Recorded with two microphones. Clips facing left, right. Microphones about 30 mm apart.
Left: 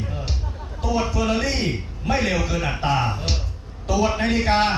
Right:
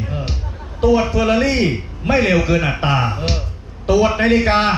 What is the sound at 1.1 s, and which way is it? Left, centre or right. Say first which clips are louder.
A man's voice: right 7 dB; right.